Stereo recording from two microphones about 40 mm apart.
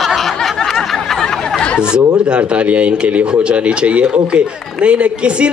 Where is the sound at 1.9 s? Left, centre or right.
Right.